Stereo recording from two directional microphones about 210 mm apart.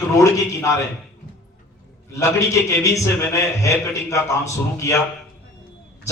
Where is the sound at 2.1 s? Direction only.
15° left (ahead or behind).